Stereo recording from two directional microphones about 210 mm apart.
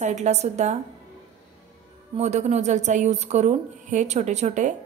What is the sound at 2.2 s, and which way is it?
Speech, 35° right (ahead or behind).